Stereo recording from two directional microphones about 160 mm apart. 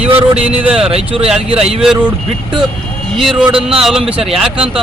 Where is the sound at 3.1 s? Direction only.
Centre (ahead or behind).